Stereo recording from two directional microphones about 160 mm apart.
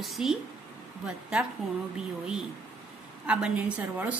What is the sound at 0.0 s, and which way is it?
A woman's voice, centre (ahead or behind).